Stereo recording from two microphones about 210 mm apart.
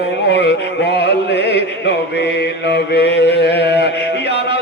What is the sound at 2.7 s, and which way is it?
Mantra, 55° left (ahead or behind).